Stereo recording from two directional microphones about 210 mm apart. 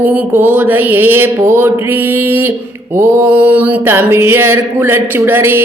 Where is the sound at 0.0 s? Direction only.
10° right (ahead or behind).